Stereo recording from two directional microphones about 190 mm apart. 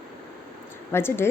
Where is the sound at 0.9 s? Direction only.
10° left (ahead or behind).